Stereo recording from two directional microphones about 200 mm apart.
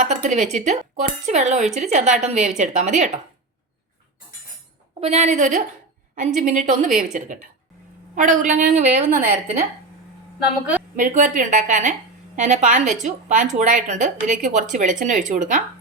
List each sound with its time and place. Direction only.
0.0 s a woman's voice: 40° right (ahead or behind)
4.9 s a woman's voice: 30° right (ahead or behind)
10.9 s a woman's voice: 40° right (ahead or behind)